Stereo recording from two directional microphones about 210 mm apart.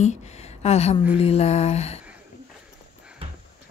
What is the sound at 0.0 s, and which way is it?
Speech, 30° left (ahead or behind).